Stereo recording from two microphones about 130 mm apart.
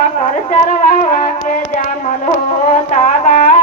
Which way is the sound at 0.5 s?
80° left.